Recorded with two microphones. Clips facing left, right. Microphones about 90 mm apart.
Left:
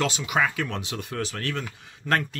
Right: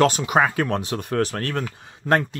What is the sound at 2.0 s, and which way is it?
Speech, 25° right (ahead or behind).